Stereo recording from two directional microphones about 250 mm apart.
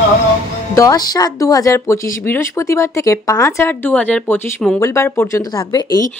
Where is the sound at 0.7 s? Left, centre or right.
Centre.